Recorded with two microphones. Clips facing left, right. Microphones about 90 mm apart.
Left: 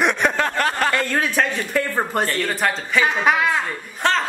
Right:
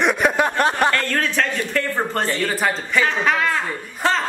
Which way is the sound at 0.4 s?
15° right (ahead or behind).